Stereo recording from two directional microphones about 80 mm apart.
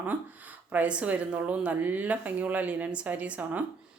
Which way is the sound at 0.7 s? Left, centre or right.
Centre.